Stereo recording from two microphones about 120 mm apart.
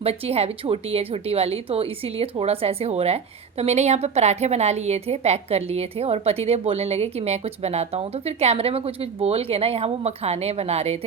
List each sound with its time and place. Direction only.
0.0 s a woman's voice: 55° right (ahead or behind)